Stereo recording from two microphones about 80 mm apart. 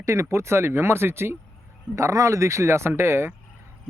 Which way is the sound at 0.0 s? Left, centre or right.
Right.